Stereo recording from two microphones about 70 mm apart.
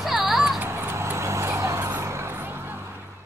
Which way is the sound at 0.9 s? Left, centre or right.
Right.